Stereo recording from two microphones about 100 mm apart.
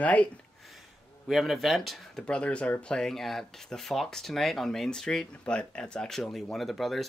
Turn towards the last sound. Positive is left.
turn(degrees=0)  # may be behind; listen again after turning